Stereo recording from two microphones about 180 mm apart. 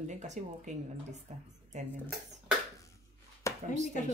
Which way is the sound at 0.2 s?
40° right (ahead or behind).